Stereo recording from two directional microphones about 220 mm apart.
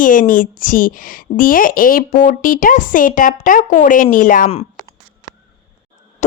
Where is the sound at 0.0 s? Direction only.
40° left (ahead or behind).